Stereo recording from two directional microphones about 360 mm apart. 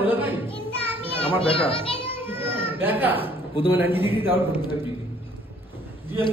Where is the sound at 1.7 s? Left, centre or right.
Centre.